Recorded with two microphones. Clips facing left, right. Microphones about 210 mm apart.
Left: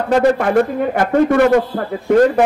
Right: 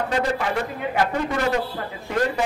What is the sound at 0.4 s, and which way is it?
A man's voice, 55° left (ahead or behind).